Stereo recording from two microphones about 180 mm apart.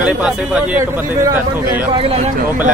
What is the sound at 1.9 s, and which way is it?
Speech, 30° right (ahead or behind).